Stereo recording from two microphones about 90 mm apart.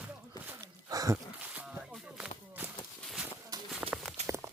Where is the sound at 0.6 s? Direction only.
40° right (ahead or behind).